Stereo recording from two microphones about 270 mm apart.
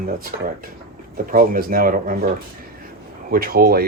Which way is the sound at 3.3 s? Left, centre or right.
Right.